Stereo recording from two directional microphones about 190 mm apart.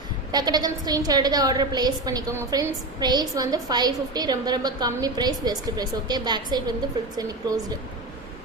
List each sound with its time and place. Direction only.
0.3 s a woman's voice: 20° right (ahead or behind)